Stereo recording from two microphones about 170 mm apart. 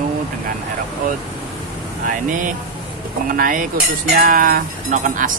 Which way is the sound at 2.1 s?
50° right (ahead or behind).